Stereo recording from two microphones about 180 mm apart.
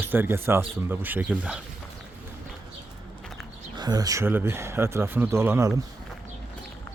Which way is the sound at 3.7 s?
20° right (ahead or behind).